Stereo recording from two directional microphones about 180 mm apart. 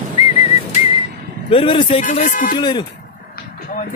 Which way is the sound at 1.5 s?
30° left (ahead or behind).